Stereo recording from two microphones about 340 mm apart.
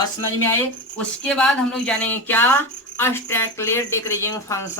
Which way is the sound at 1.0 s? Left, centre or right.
Centre.